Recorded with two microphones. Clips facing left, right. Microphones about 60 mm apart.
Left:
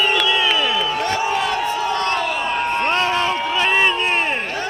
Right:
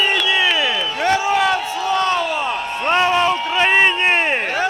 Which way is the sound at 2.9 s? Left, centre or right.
Centre.